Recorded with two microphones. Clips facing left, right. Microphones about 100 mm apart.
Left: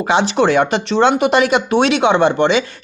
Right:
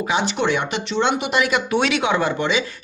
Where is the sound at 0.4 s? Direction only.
90° left.